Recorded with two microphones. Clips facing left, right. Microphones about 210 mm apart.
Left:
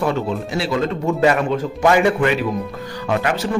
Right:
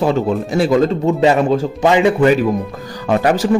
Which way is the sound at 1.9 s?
20° right (ahead or behind).